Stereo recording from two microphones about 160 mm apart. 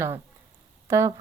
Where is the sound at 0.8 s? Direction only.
15° right (ahead or behind).